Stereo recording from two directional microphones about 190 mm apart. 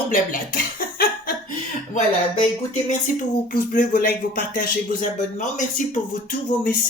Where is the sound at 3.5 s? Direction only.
45° left (ahead or behind).